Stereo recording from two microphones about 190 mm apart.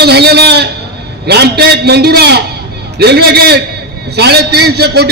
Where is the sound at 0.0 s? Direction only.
60° right (ahead or behind).